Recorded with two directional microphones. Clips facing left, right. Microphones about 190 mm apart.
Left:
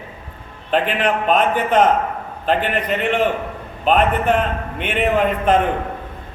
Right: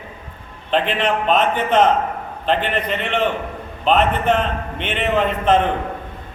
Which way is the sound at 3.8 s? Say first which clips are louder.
Even; 10° left (ahead or behind).